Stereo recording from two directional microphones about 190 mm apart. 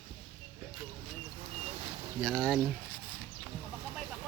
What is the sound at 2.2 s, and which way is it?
Speech, 5° left (ahead or behind).